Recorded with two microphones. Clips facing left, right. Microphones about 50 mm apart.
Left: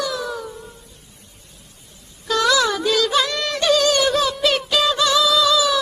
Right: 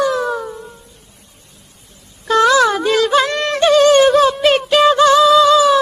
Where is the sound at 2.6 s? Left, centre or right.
Right.